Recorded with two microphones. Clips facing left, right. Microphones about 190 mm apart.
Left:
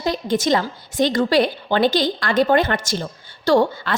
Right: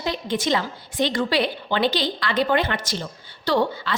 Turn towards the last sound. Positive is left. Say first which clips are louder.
# left 5 dB
turn(degrees=50)  # may be behind; listen again after turning